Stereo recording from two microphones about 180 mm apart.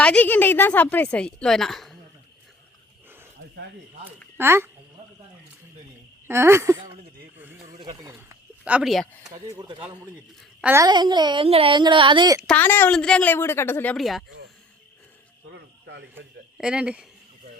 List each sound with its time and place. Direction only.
0.0 s a woman's voice: 5° left (ahead or behind)
4.4 s speech: 15° right (ahead or behind)
6.2 s speech: 15° right (ahead or behind)
7.3 s a sound: 10° right (ahead or behind)
8.6 s speech: 5° right (ahead or behind)
9.3 s speech: 25° right (ahead or behind)
10.6 s a child's voice: 10° right (ahead or behind)
10.8 s speech: 25° right (ahead or behind)
12.5 s a woman's voice: 10° left (ahead or behind)
13.9 s speech: centre (ahead or behind)
15.4 s a sound: 75° right (ahead or behind)
16.1 s speech: 5° right (ahead or behind)